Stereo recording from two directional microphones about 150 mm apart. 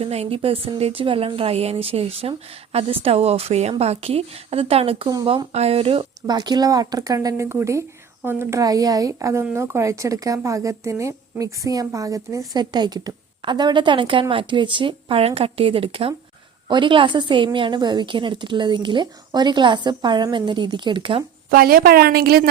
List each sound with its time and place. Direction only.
0.0 s a woman's voice: 45° right (ahead or behind)
21.5 s a woman's voice: 75° right (ahead or behind)